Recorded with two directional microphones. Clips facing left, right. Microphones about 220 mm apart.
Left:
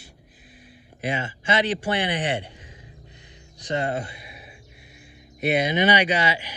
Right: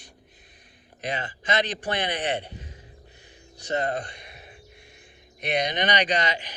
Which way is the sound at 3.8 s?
10° left (ahead or behind).